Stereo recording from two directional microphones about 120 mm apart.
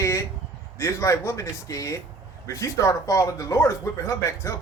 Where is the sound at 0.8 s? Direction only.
25° left (ahead or behind).